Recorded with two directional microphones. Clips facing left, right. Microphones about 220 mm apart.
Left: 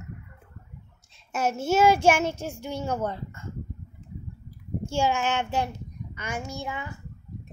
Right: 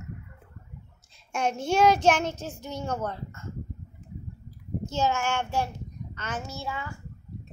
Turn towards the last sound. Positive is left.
turn(degrees=20)  # may be behind; listen again after turning